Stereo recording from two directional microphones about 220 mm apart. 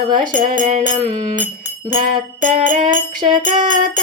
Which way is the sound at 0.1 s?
35° right (ahead or behind).